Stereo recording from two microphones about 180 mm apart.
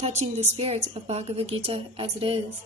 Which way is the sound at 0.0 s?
40° right (ahead or behind).